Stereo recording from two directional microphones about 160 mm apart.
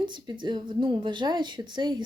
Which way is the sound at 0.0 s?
30° right (ahead or behind).